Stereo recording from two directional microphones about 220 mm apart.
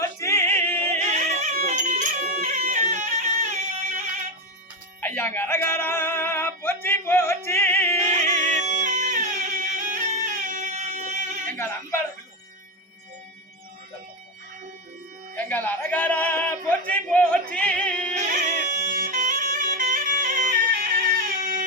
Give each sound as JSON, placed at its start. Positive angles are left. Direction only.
{"t": 0.0, "sound": "yodeling", "side_deg": 10}
{"t": 0.9, "sound": "music", "side_deg": -30}
{"t": 4.9, "sound": "music", "side_deg": 10}
{"t": 7.9, "sound": "music", "side_deg": -35}
{"t": 11.5, "sound": "a sound", "side_deg": 10}
{"t": 15.4, "sound": "a sound", "side_deg": 10}
{"t": 17.5, "sound": "music", "side_deg": 5}
{"t": 18.1, "sound": "music", "side_deg": -30}